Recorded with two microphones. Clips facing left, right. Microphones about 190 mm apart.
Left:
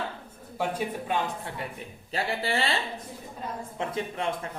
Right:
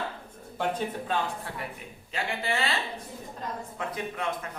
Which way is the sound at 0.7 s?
10° left (ahead or behind).